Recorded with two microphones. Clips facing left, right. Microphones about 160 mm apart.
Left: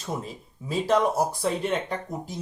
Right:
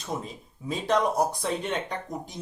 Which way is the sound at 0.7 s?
5° left (ahead or behind).